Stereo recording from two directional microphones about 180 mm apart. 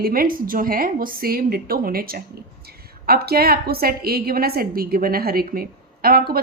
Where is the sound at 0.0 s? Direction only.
50° right (ahead or behind).